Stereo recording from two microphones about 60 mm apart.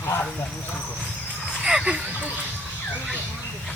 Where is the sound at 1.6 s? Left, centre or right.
Centre.